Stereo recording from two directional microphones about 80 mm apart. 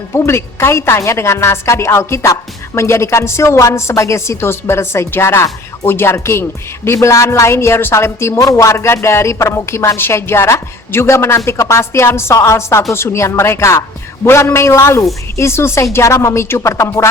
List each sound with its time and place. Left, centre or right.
0.1 s a woman's voice: left